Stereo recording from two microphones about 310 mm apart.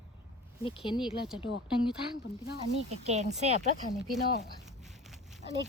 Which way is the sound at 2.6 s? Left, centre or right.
Right.